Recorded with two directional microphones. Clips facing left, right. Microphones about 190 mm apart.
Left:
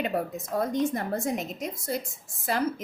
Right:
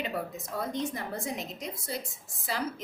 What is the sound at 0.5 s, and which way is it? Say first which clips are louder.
A woman's voice: left 7 dB; 50° left (ahead or behind).